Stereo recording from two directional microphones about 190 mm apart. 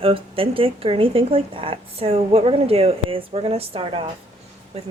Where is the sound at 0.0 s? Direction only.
30° right (ahead or behind).